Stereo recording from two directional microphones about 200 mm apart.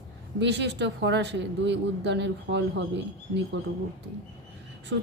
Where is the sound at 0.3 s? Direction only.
60° right (ahead or behind).